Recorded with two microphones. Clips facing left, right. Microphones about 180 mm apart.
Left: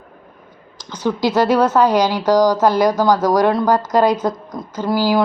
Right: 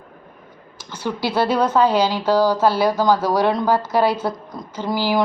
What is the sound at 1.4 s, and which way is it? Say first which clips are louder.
A woman's voice: left 2 dB; 10° left (ahead or behind).